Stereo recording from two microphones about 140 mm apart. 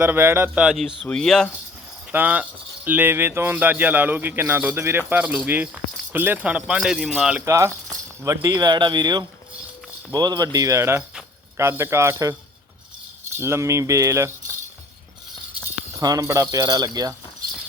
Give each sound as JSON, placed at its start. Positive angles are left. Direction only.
{"t": 0.0, "sound": "speech", "side_deg": -15}
{"t": 2.1, "sound": "speech", "side_deg": -10}
{"t": 7.4, "sound": "speech", "side_deg": -20}
{"t": 16.0, "sound": "speech", "side_deg": -25}